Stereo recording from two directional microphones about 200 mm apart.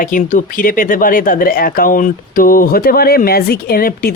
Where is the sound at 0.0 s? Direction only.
40° left (ahead or behind).